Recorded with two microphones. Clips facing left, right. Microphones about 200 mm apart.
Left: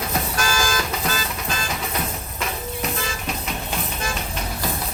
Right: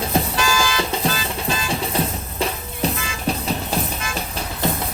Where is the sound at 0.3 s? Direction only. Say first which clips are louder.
Right 2 dB; 45° left (ahead or behind).